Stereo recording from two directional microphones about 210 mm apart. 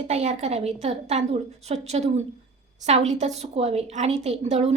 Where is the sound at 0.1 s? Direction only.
30° right (ahead or behind).